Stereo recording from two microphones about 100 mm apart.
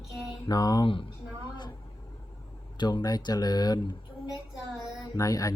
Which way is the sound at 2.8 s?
45° left (ahead or behind).